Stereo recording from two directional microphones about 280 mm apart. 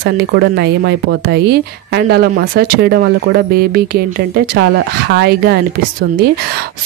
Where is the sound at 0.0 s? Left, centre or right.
Right.